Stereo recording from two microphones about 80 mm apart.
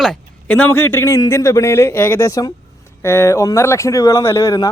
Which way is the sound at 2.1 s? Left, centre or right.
Left.